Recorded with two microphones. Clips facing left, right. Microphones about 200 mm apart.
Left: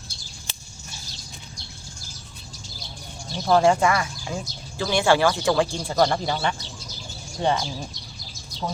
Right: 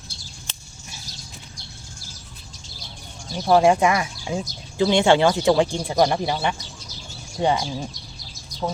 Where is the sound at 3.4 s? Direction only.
15° right (ahead or behind).